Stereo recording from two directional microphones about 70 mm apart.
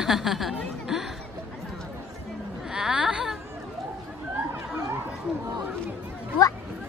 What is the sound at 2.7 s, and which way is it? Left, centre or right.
Whimper, centre.